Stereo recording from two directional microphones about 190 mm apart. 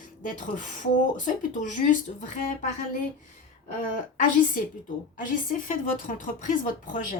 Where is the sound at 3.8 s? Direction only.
45° left (ahead or behind).